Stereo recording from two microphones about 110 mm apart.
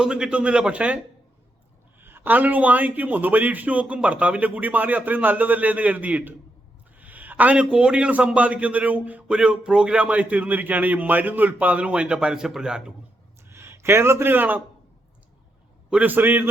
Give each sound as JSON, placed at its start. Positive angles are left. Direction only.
{"t": 0.0, "sound": "a man's voice", "side_deg": -5}
{"t": 2.0, "sound": "a man's voice", "side_deg": -20}
{"t": 13.5, "sound": "speech", "side_deg": -25}
{"t": 15.9, "sound": "a man's voice", "side_deg": -15}